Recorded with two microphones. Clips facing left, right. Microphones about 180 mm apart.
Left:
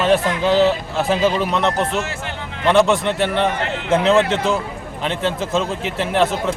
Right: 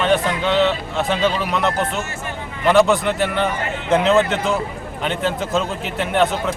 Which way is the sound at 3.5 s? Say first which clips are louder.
Left 2 dB; 75° left (ahead or behind).